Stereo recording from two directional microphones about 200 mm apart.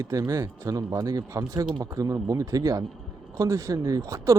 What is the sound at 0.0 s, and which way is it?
Speech, 15° right (ahead or behind).